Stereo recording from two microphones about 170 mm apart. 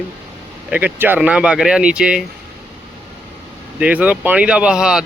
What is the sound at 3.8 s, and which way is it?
Speech, 10° right (ahead or behind).